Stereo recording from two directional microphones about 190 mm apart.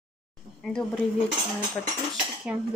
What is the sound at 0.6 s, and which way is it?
Speech, centre (ahead or behind).